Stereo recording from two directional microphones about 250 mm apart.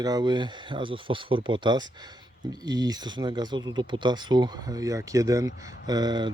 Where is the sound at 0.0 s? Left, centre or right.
Centre.